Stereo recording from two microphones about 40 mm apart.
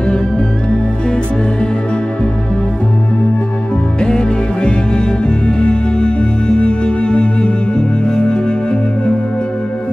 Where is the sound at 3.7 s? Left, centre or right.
Left.